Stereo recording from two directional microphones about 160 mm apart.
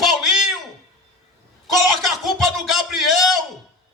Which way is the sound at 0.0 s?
Centre (ahead or behind).